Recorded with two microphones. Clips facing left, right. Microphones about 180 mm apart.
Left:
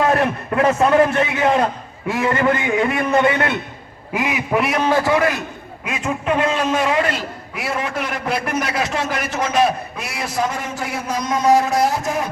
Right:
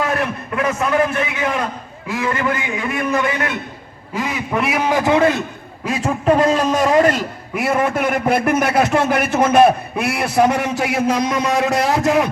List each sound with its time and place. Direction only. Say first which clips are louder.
0.1 s a man's voice: left 3 dB; 35° left (ahead or behind)
4.1 s quack: left 1 dB; 15° left (ahead or behind)
4.5 s a man's voice: left 1 dB; centre (ahead or behind)
4.8 s a man's voice: right 4 dB; 15° right (ahead or behind)
5.8 s a man's voice: right 5 dB; 35° right (ahead or behind); by 12.3 s 75° right (ahead or behind)